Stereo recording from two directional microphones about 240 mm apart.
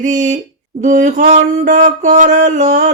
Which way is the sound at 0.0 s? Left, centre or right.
Right.